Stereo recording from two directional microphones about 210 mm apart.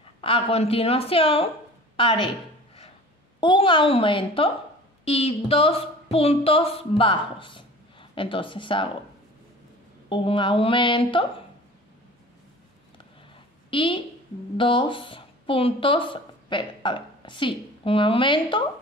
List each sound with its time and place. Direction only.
0.2 s a woman's voice: 25° left (ahead or behind)
2.0 s a sound: 25° left (ahead or behind)
3.3 s a woman's voice: 25° left (ahead or behind)
10.0 s a woman's voice: 25° left (ahead or behind)
13.7 s a woman's voice: 25° left (ahead or behind)